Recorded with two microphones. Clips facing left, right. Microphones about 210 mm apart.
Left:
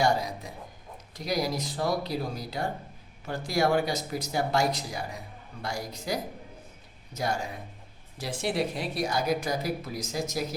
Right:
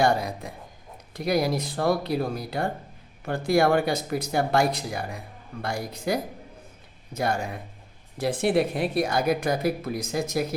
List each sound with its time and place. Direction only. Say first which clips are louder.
0.0 s speech: right 3 dB; 55° right (ahead or behind)